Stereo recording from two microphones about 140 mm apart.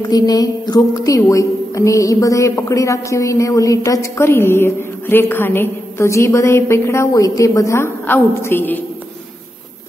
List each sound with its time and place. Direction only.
0.0 s a woman's voice: 30° left (ahead or behind)